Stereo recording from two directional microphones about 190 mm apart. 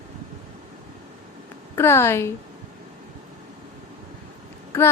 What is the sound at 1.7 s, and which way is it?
Speech, 15° left (ahead or behind).